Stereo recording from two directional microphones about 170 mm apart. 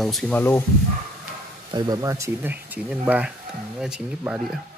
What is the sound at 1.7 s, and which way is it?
Speech, 25° right (ahead or behind).